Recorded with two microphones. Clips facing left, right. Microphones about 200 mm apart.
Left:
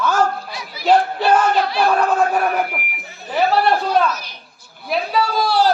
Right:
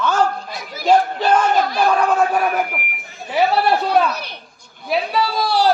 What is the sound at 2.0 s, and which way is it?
Speech, 10° right (ahead or behind).